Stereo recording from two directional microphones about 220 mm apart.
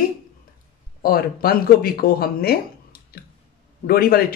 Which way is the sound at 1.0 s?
45° left (ahead or behind).